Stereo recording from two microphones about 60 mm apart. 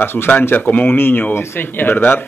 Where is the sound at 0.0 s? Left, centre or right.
Left.